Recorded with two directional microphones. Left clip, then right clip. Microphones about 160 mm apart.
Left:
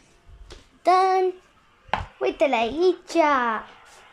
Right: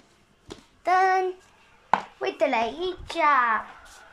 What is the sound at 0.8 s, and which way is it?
Child singing, 25° left (ahead or behind).